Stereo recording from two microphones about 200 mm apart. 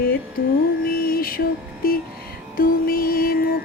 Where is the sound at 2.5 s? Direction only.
45° left (ahead or behind).